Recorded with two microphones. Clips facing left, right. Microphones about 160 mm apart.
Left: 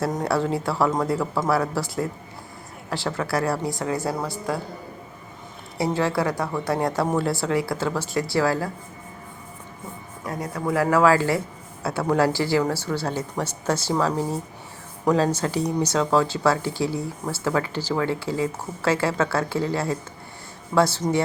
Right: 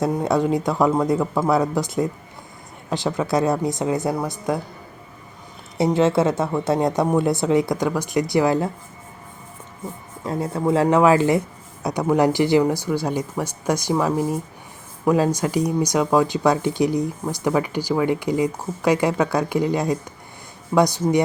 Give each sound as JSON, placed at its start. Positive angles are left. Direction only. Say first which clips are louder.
{"t": 0.1, "sound": "speech", "louder": "right 4 dB", "side_deg": -15}
{"t": 5.7, "sound": "speech", "louder": "right 5 dB", "side_deg": -20}
{"t": 10.2, "sound": "speech", "louder": "right 5 dB", "side_deg": -25}